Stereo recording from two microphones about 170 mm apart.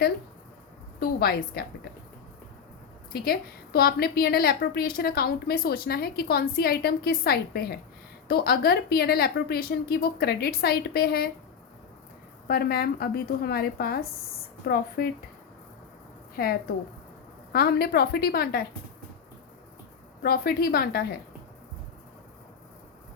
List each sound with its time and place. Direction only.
0.9 s a woman's voice: 65° left (ahead or behind)
3.1 s a woman's voice: 65° left (ahead or behind)
12.5 s a woman's voice: 65° left (ahead or behind)
17.5 s a woman's voice: 65° left (ahead or behind)
20.2 s a woman's voice: 65° left (ahead or behind)